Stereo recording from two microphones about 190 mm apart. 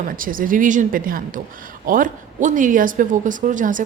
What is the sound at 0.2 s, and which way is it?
Speech, 45° right (ahead or behind).